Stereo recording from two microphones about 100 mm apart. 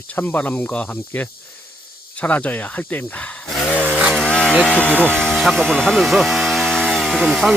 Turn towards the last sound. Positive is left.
turn(degrees=-5)  # may be behind; listen again after turning